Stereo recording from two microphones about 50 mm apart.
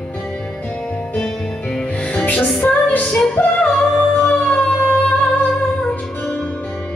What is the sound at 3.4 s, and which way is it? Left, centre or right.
Music, left.